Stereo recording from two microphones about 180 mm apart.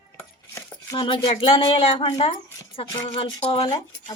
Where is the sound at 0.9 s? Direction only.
25° left (ahead or behind).